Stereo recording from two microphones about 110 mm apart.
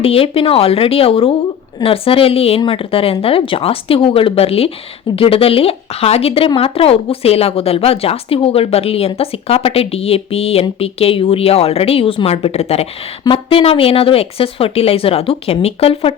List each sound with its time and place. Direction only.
0.0 s a woman's voice: 60° left (ahead or behind)